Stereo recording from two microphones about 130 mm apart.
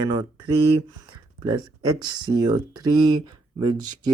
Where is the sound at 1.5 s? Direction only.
35° right (ahead or behind).